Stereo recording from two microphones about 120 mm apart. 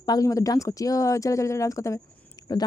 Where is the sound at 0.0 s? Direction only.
30° left (ahead or behind).